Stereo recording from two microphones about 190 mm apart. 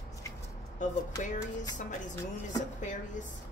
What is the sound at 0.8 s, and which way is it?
Speech, 40° left (ahead or behind).